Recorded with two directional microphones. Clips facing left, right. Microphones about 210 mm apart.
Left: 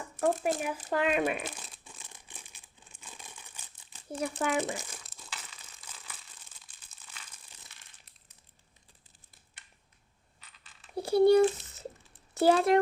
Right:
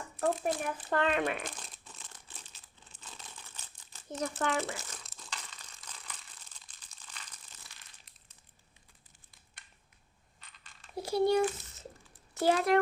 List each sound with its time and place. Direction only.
0.6 s crumpling: 10° left (ahead or behind)
5.0 s crumpling: 5° left (ahead or behind)
10.4 s coin: 5° left (ahead or behind)
10.9 s a sound: 30° left (ahead or behind)
12.4 s a child's voice: 30° left (ahead or behind)